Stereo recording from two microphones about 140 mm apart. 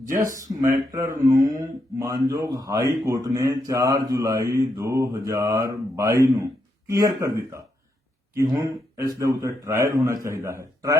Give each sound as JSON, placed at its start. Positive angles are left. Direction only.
{"t": 0.0, "sound": "speech", "side_deg": -70}
{"t": 0.9, "sound": "mantra", "side_deg": -25}